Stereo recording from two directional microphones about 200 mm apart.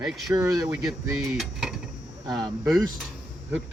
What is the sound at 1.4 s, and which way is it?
Dishes, centre (ahead or behind).